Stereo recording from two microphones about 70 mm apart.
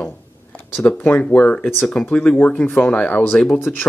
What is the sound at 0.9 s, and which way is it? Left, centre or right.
Speech, left.